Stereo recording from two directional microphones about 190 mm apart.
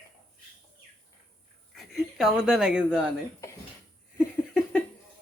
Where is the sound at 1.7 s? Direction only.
Centre (ahead or behind).